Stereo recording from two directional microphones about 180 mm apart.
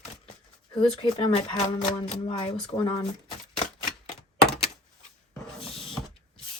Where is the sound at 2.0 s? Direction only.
30° left (ahead or behind).